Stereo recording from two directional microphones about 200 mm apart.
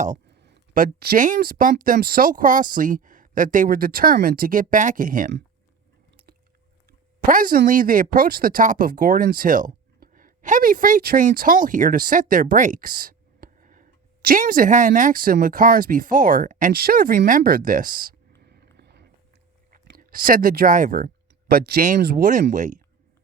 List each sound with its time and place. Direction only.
0.3 s speech: 55° right (ahead or behind)
7.3 s speech: 45° right (ahead or behind)
18.4 s a sound: 55° right (ahead or behind)
19.7 s speech: 50° right (ahead or behind)